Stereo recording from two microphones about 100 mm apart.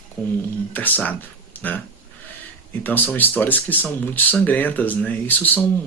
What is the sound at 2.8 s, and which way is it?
Speech, 15° left (ahead or behind).